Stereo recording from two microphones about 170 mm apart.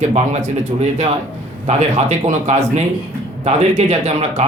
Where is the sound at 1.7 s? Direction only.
40° right (ahead or behind).